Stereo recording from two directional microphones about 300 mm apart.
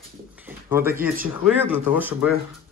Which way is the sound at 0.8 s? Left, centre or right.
Right.